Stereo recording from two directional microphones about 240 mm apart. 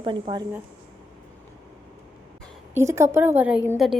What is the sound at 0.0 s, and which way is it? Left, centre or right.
Speech, centre.